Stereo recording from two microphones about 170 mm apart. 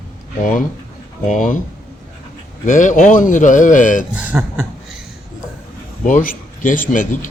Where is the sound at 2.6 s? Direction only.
50° left (ahead or behind).